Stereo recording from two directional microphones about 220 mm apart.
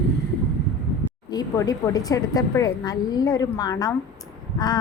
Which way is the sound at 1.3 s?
15° left (ahead or behind).